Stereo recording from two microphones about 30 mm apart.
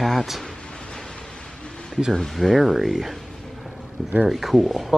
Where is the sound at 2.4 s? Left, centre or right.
Centre.